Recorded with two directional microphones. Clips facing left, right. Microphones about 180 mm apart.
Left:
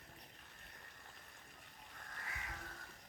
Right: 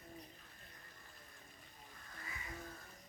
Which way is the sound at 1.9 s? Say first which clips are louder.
Left 1 dB; 70° left (ahead or behind).